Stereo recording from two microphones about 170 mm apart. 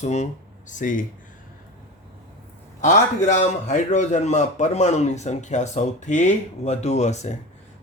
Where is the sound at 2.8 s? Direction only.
45° left (ahead or behind).